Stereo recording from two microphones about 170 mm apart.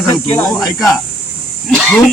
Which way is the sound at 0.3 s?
20° left (ahead or behind).